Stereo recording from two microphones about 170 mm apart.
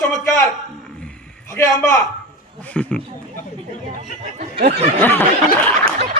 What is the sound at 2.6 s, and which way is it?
Snicker, 5° left (ahead or behind).